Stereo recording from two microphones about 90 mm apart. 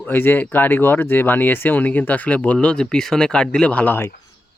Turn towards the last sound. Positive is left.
turn(degrees=20)  # may be behind; listen again after turning